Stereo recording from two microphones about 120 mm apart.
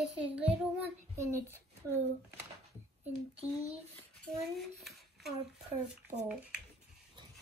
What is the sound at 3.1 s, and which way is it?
Speech, 60° right (ahead or behind).